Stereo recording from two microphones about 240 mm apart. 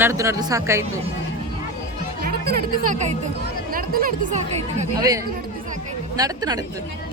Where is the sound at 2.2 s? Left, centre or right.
Right.